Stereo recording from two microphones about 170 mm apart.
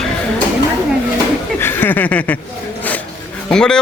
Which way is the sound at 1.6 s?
10° left (ahead or behind).